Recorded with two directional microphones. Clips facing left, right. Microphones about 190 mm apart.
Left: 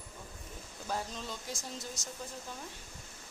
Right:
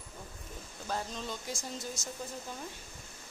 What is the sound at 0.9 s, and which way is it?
Speech, 5° left (ahead or behind).